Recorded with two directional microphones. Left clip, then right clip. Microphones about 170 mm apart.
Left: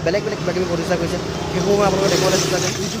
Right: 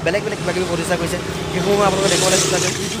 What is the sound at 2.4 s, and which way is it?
Speech, 55° left (ahead or behind).